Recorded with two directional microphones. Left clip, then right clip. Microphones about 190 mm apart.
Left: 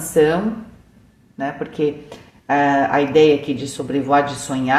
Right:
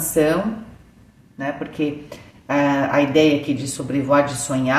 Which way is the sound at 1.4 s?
35° left (ahead or behind).